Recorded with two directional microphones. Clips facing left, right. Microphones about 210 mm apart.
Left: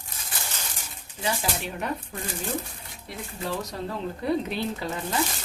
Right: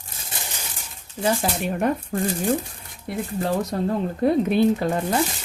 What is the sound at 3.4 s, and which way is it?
Speech, 50° right (ahead or behind).